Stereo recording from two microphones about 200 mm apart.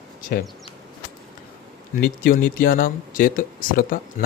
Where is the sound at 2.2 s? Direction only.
45° left (ahead or behind).